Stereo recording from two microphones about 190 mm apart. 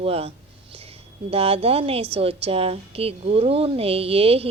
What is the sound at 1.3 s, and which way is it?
A woman's voice, 30° right (ahead or behind).